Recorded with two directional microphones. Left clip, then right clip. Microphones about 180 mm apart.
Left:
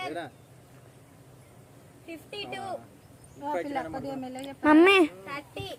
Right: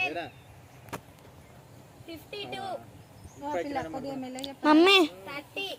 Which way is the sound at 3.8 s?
15° right (ahead or behind).